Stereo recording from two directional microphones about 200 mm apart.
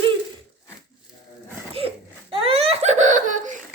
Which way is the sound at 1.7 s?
30° right (ahead or behind).